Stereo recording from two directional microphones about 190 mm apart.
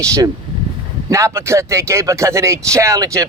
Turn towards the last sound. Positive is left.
turn(degrees=-15)  # may be behind; listen again after turning